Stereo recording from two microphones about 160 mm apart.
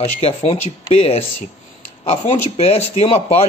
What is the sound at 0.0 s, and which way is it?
A man's voice, 40° left (ahead or behind).